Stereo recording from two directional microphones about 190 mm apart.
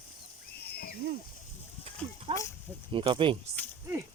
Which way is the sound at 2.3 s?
30° right (ahead or behind).